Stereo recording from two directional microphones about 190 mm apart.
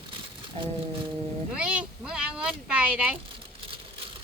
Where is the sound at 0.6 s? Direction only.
30° right (ahead or behind).